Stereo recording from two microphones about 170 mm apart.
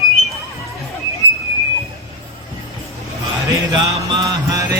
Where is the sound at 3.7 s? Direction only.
20° right (ahead or behind).